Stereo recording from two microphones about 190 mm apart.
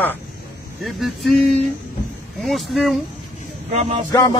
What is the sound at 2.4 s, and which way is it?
Speech, centre (ahead or behind).